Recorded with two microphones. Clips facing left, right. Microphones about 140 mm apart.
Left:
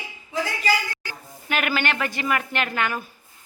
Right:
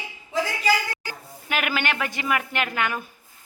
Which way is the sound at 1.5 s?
10° right (ahead or behind).